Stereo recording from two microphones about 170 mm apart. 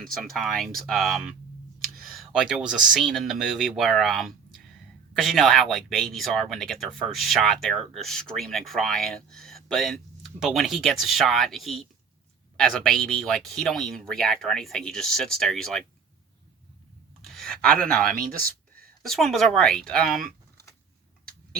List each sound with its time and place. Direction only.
0.0 s speech: centre (ahead or behind)
17.2 s a sound: centre (ahead or behind)
18.2 s speech: 55° right (ahead or behind)
19.0 s speech: centre (ahead or behind)